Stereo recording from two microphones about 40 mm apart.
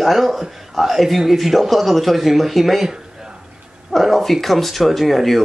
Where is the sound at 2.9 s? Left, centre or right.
Centre.